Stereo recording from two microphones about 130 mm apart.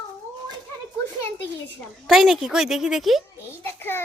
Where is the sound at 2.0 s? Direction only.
Centre (ahead or behind).